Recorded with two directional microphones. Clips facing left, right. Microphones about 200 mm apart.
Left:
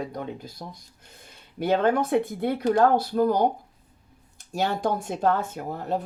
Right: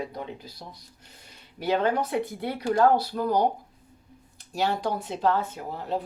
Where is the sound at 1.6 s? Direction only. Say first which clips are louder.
Left 3 dB; 50° left (ahead or behind).